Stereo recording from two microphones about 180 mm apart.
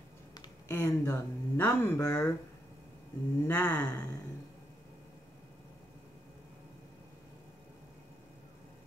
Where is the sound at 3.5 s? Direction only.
10° left (ahead or behind).